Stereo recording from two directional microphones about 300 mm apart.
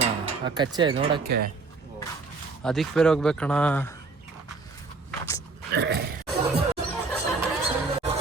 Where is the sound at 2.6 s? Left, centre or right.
Centre.